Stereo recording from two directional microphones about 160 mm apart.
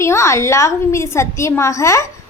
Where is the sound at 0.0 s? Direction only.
15° left (ahead or behind).